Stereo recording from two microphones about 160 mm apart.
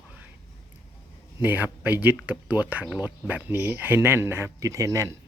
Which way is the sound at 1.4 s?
10° right (ahead or behind).